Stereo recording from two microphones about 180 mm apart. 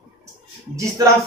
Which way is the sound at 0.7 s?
15° right (ahead or behind).